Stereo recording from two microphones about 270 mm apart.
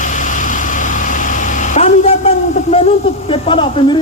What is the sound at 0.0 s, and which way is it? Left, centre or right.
Vehicle, left.